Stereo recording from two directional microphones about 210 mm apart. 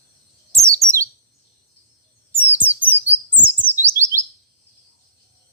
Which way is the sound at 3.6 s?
10° left (ahead or behind).